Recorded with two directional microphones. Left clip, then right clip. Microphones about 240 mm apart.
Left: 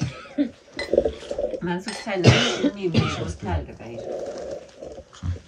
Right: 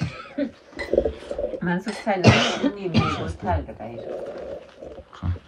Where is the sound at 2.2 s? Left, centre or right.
Right.